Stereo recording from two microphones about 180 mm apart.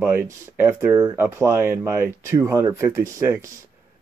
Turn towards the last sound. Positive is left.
turn(degrees=-15)  # may be behind; listen again after turning